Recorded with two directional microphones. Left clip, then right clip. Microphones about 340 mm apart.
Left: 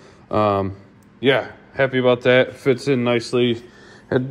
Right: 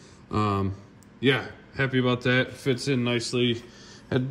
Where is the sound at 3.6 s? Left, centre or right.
Centre.